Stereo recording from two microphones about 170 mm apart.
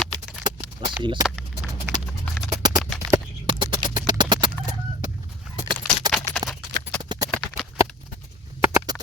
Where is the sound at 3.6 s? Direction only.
25° right (ahead or behind).